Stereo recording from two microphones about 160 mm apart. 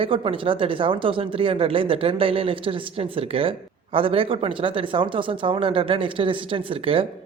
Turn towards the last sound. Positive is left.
turn(degrees=-35)  # may be behind; listen again after turning